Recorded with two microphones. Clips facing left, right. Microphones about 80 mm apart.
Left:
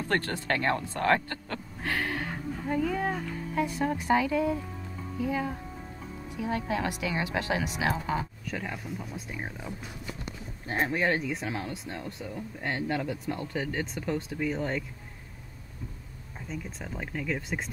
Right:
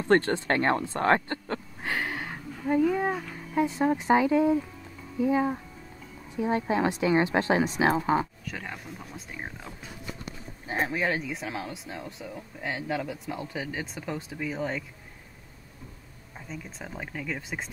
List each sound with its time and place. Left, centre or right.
0.1 s speech: right
1.8 s a sound: centre
2.7 s a woman's voice: centre
8.5 s speech: centre
10.7 s speech: centre
16.3 s speech: centre